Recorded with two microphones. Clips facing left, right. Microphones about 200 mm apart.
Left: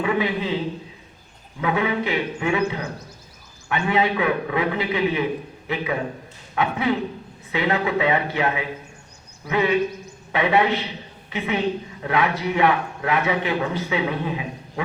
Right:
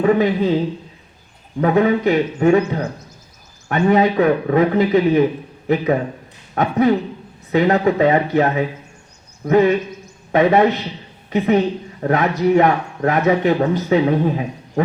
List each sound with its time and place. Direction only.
0.0 s a man's voice: 40° right (ahead or behind)
1.6 s a man's voice: 45° right (ahead or behind)